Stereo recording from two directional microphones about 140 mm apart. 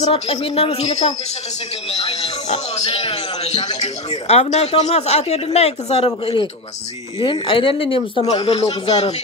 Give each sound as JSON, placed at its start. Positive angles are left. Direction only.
{"t": 0.0, "sound": "speech", "side_deg": 45}